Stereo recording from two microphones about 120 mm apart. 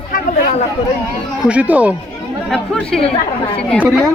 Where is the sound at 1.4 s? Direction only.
10° right (ahead or behind).